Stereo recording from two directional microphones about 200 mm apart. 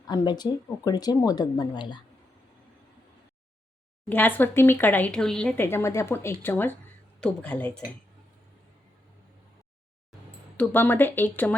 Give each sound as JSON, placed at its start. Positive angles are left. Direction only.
{"t": 0.0, "sound": "speech", "side_deg": 20}
{"t": 4.1, "sound": "speech", "side_deg": 10}
{"t": 10.6, "sound": "speech", "side_deg": 10}